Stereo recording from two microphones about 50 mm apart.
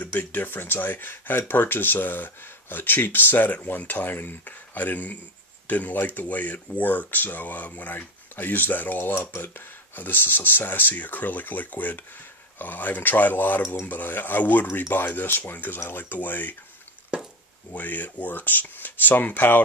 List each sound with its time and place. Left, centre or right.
0.0 s speech: left
17.7 s speech: left